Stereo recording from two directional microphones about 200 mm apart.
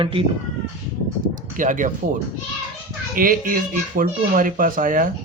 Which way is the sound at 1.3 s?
40° right (ahead or behind).